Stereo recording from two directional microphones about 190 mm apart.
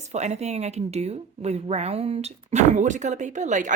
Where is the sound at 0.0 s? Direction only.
35° right (ahead or behind).